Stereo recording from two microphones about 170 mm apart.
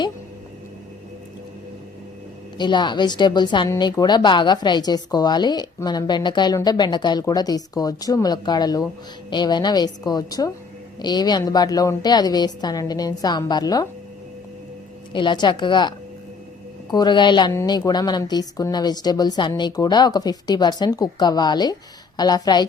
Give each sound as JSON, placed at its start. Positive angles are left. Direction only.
{"t": 2.6, "sound": "speech", "side_deg": 25}
{"t": 15.1, "sound": "speech", "side_deg": 25}